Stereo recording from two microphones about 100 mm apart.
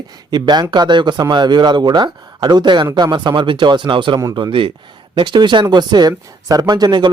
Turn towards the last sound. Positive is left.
turn(degrees=-45)  # may be behind; listen again after turning